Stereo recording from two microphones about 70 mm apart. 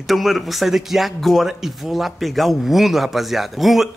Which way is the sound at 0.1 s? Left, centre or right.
Centre.